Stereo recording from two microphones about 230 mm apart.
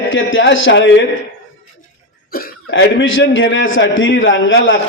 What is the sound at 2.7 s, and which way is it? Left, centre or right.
A man's voice, left.